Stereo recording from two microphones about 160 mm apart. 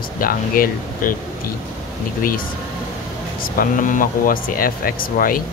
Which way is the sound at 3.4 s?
60° left (ahead or behind).